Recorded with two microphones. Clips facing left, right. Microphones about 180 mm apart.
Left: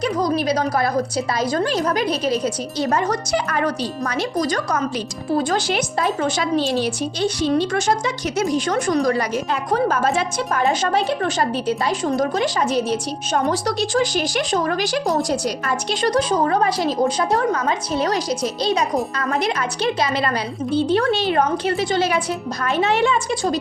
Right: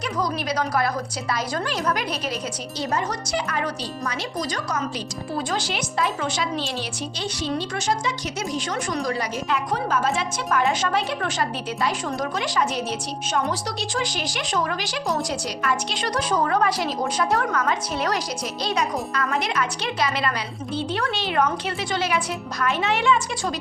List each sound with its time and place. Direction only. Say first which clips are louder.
0.0 s a woman's voice: left 7 dB; 30° left (ahead or behind)
2.7 s speech: left 4 dB; 55° left (ahead or behind)
6.1 s a woman's voice: left 6 dB; 35° left (ahead or behind)
6.3 s speech: left 7 dB; 45° left (ahead or behind)
9.5 s speech: left 3 dB; 40° left (ahead or behind)
10.3 s a woman's voice: left 3 dB; 35° left (ahead or behind)
13.5 s a woman's voice: left 7 dB; 50° left (ahead or behind)